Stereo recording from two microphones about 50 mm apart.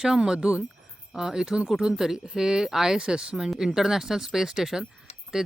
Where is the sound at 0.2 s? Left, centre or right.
Centre.